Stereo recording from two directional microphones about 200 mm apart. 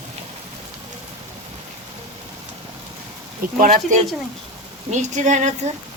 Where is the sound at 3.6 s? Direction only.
45° right (ahead or behind).